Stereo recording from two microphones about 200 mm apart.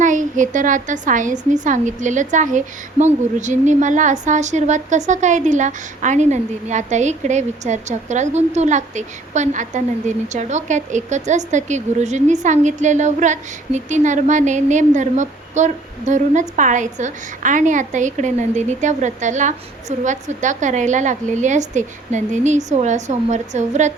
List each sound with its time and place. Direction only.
0.0 s a woman's voice: 40° right (ahead or behind)